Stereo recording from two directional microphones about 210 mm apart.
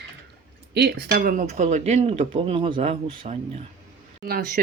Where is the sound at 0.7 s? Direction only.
50° right (ahead or behind).